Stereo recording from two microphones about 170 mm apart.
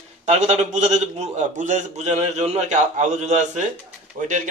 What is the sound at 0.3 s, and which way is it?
A man's voice, 40° right (ahead or behind).